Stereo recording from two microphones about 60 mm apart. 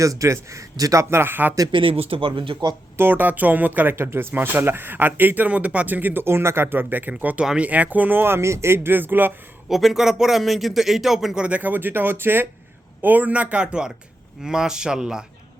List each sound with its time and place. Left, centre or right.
0.0 s a man's voice: right
1.1 s speech: right
3.0 s speech: right
3.9 s speech: right
9.6 s speech: centre
11.4 s speech: right